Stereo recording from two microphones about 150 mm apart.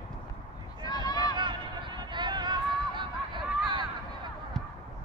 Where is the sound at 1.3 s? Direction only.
30° right (ahead or behind).